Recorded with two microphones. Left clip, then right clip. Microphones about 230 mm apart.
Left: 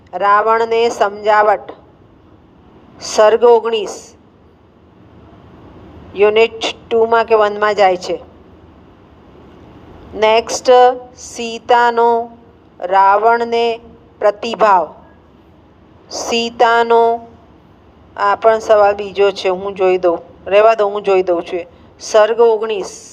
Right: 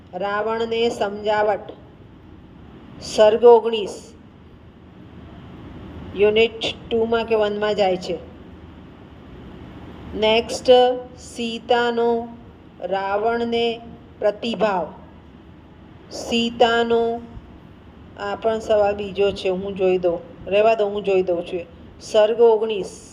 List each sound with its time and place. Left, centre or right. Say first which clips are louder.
0.1 s speech: left 12 dB; left
3.0 s speech: left 4 dB; left
6.1 s speech: left 6 dB; left
10.2 s speech: left 6 dB; left
16.0 s speech: left 6 dB; left
18.2 s speech: left 11 dB; left